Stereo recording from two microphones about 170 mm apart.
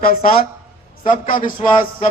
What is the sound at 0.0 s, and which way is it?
A man's voice, 60° left (ahead or behind).